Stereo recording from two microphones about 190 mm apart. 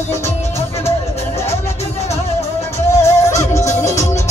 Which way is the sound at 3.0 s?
15° left (ahead or behind).